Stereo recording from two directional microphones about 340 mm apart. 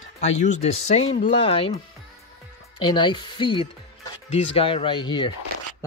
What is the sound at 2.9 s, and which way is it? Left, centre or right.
Speech, centre.